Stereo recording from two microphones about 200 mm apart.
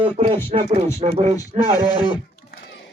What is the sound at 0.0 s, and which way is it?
Speech, 25° right (ahead or behind).